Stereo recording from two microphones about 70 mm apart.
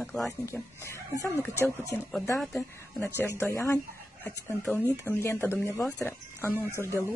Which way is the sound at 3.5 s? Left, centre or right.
Left.